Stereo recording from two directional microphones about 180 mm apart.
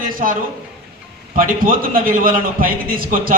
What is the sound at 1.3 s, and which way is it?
A man's voice, 50° right (ahead or behind).